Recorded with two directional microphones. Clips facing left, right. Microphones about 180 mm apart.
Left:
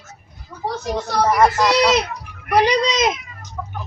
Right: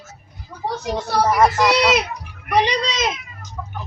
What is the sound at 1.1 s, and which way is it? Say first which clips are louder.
A child's voice: even; centre (ahead or behind).